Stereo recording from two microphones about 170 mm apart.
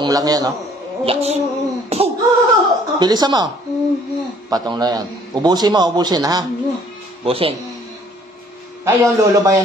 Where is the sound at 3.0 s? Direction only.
25° right (ahead or behind).